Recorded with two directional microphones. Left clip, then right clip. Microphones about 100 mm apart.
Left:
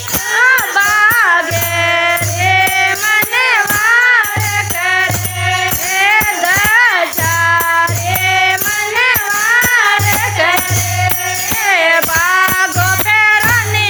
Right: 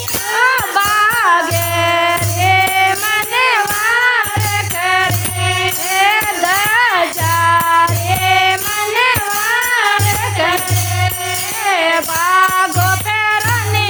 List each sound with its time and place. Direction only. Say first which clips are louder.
0.3 s music: left 3 dB; 45° right (ahead or behind)
11.6 s music: left 3 dB; 30° right (ahead or behind)